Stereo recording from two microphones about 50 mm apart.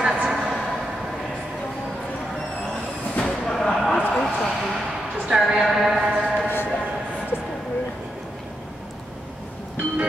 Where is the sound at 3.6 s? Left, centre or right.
Centre.